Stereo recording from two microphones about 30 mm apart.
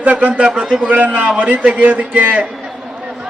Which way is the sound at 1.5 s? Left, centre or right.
Right.